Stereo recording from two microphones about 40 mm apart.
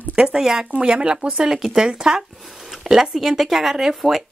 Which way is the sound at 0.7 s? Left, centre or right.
Right.